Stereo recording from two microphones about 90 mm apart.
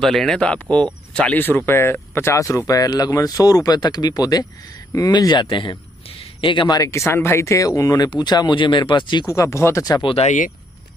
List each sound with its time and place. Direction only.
0.0 s speech: 5° left (ahead or behind)
1.7 s speech: 25° left (ahead or behind); by 6.7 s 70° left (ahead or behind)
6.7 s speech: 35° left (ahead or behind)
8.1 s speech: 55° left (ahead or behind)
9.2 s speech: 35° left (ahead or behind)